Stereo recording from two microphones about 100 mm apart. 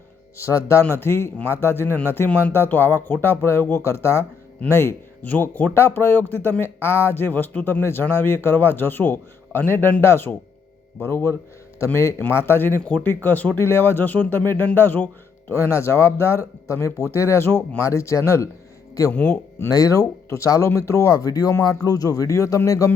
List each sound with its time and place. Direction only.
0.3 s a man's voice: 30° left (ahead or behind)
15.7 s a man's voice: 25° left (ahead or behind)
19.7 s speech: 35° left (ahead or behind)